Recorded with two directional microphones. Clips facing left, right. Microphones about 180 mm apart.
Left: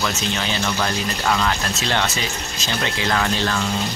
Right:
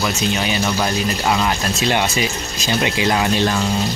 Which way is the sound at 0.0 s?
15° right (ahead or behind).